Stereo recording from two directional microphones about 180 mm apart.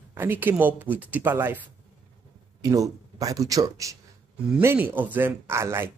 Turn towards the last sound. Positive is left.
turn(degrees=-15)  # may be behind; listen again after turning